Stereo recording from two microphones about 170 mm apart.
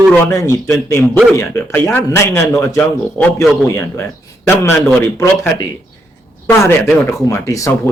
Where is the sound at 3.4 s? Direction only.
Centre (ahead or behind).